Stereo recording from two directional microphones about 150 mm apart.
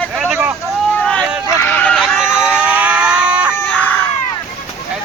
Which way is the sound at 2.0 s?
5° right (ahead or behind).